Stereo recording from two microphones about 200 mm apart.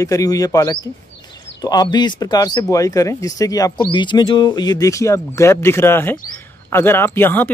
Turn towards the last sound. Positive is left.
turn(degrees=10)  # may be behind; listen again after turning